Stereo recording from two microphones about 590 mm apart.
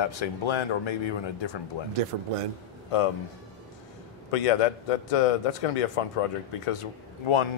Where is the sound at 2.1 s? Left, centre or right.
Right.